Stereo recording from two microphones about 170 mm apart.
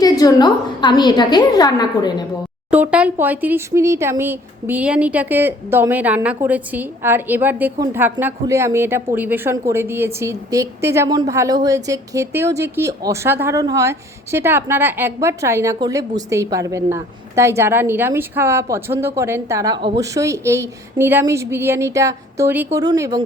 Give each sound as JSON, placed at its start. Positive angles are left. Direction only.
{"t": 0.0, "sound": "a woman's voice", "side_deg": 20}
{"t": 2.6, "sound": "a woman's voice", "side_deg": -10}